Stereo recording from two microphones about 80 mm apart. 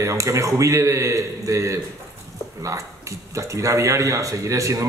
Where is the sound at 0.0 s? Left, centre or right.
Right.